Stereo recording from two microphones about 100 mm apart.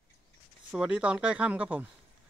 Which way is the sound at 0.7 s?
10° right (ahead or behind).